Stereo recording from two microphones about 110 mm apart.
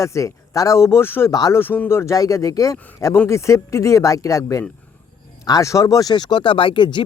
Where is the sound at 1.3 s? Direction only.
35° left (ahead or behind).